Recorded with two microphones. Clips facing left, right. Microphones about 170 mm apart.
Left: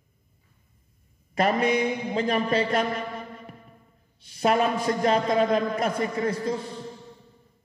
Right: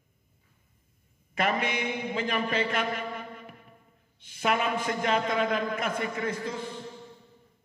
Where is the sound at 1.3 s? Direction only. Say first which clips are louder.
Left 6 dB; 35° left (ahead or behind).